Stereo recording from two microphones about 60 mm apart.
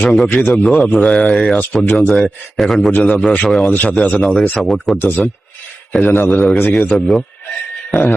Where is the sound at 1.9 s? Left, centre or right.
Left.